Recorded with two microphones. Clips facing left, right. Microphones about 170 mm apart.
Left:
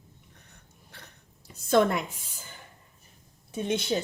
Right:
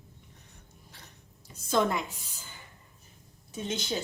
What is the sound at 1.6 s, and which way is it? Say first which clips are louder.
Speech: left 4 dB; 60° left (ahead or behind).